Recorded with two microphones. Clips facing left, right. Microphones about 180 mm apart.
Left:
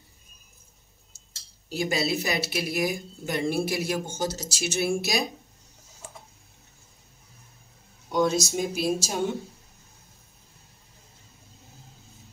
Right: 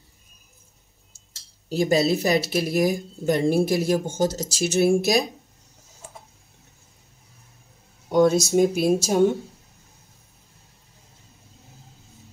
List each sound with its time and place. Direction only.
1.7 s speech: 45° right (ahead or behind)
8.1 s speech: 55° right (ahead or behind)